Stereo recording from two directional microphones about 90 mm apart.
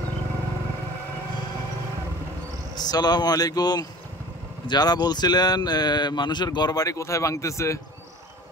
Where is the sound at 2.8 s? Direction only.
50° left (ahead or behind).